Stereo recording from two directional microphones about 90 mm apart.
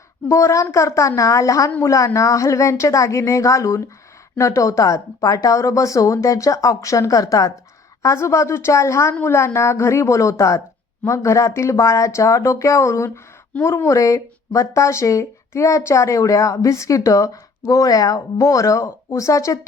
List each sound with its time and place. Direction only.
0.3 s speech: 35° left (ahead or behind)